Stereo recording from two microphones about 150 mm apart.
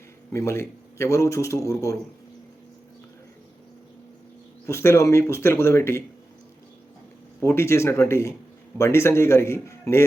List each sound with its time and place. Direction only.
0.3 s a man's voice: 15° left (ahead or behind)
4.6 s speech: 20° left (ahead or behind)
7.4 s speech: 15° left (ahead or behind)